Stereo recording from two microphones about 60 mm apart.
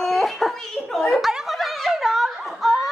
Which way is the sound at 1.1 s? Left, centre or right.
Centre.